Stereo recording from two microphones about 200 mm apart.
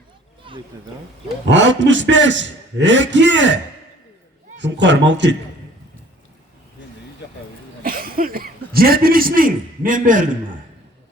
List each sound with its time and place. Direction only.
1.5 s a man's voice: 65° right (ahead or behind)
7.9 s a man's voice: 45° right (ahead or behind)